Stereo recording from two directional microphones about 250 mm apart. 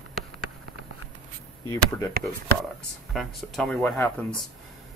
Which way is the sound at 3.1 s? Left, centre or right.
Centre.